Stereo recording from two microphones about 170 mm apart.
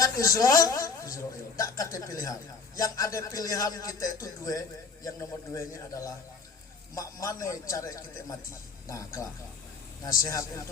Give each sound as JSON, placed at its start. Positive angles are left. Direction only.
{"t": 0.0, "sound": "a man's voice", "side_deg": 20}
{"t": 10.2, "sound": "a man's voice", "side_deg": 20}